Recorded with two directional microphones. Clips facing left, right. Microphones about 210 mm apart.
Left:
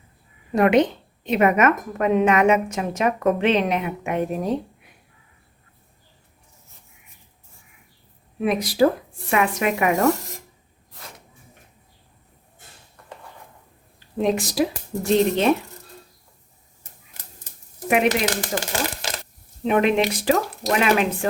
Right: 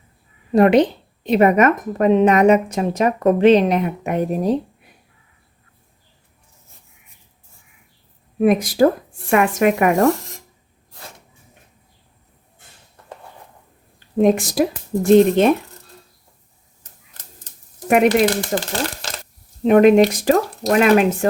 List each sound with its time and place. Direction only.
0.5 s a woman's voice: 35° right (ahead or behind)
8.4 s speech: 50° right (ahead or behind)
14.2 s speech: 50° right (ahead or behind)
17.8 s speech: 45° right (ahead or behind)
19.6 s speech: 45° right (ahead or behind)